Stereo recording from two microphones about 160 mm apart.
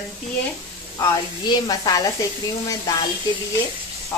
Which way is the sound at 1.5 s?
25° left (ahead or behind).